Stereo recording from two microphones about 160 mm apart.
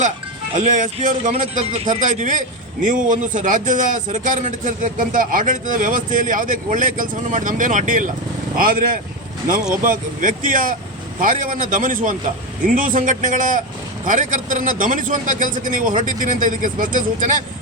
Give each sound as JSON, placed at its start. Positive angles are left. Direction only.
{"t": 0.5, "sound": "a man's voice", "side_deg": -50}